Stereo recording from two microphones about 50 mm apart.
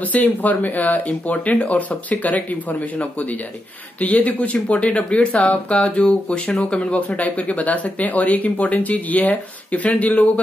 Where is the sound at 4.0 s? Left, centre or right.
Left.